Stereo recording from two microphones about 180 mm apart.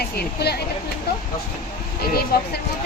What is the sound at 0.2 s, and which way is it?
Speech, 65° left (ahead or behind).